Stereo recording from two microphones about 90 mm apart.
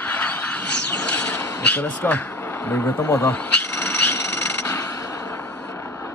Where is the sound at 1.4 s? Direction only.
15° left (ahead or behind).